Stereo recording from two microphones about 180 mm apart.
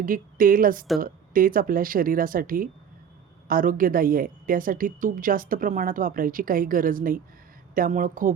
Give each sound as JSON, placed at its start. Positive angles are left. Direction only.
{"t": 0.0, "sound": "a woman's voice", "side_deg": -50}